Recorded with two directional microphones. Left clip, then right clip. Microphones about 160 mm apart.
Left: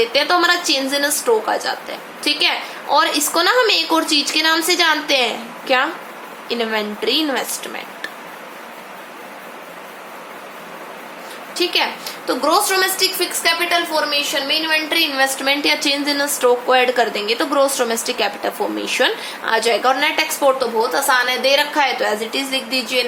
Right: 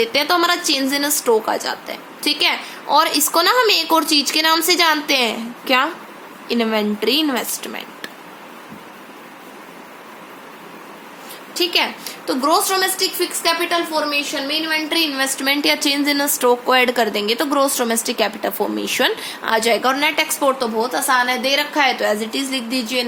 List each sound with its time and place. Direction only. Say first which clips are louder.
0.0 s a woman's voice: left 1 dB; 45° right (ahead or behind)
11.5 s a woman's voice: even; 45° right (ahead or behind)